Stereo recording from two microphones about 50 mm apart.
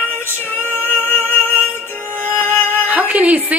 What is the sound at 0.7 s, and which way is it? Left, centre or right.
Music, left.